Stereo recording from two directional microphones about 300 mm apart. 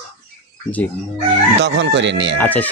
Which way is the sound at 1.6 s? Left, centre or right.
Right.